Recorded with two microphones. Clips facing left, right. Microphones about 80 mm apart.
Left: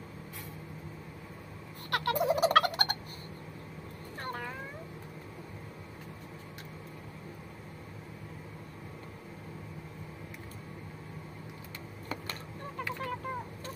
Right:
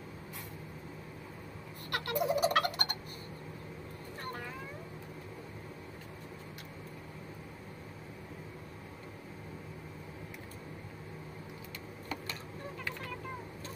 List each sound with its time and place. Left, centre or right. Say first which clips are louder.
1.9 s turkey: left 4 dB; left